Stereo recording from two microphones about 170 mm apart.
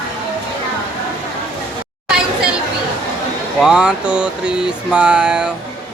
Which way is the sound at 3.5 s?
5° right (ahead or behind).